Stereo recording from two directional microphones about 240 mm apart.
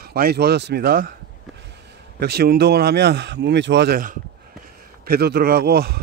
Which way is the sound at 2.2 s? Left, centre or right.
Right.